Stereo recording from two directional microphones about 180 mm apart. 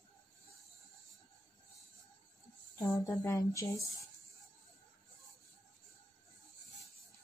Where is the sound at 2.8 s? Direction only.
20° left (ahead or behind).